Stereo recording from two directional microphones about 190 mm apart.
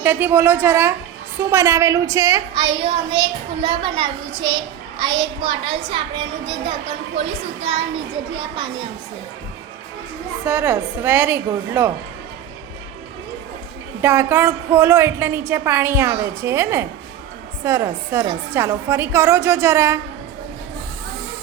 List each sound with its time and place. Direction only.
0.0 s a woman's voice: 10° right (ahead or behind)
10.4 s a woman's voice: 15° right (ahead or behind)
14.0 s a woman's voice: 10° right (ahead or behind)